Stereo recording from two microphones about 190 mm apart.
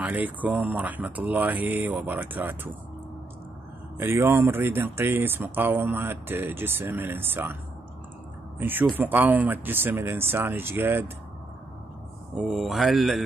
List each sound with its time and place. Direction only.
0.0 s speech: 10° right (ahead or behind)
4.0 s speech: 10° right (ahead or behind)
8.5 s speech: 10° right (ahead or behind)
12.4 s speech: centre (ahead or behind)